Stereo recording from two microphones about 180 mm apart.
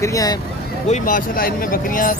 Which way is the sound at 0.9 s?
50° left (ahead or behind).